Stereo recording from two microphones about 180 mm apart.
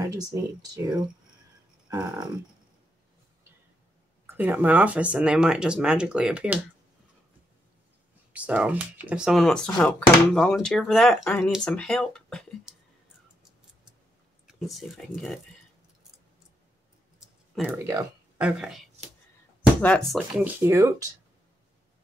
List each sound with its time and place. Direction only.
0.0 s speech: 20° right (ahead or behind)
4.3 s speech: 10° right (ahead or behind)
8.3 s speech: 10° right (ahead or behind)
14.7 s speech: centre (ahead or behind)
17.6 s speech: 10° right (ahead or behind)
19.8 s speech: 5° left (ahead or behind)
20.4 s speech: 15° right (ahead or behind)